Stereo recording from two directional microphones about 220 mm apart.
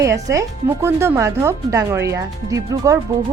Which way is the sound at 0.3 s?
10° right (ahead or behind).